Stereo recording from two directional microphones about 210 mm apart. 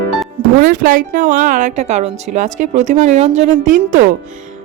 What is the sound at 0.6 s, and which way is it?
Speech, 40° right (ahead or behind).